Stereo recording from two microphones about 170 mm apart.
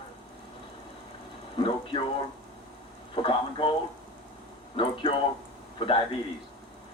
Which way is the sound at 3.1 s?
30° left (ahead or behind).